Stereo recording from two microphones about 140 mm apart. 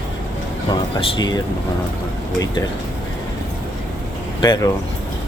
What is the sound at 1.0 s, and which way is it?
Speech, 35° left (ahead or behind).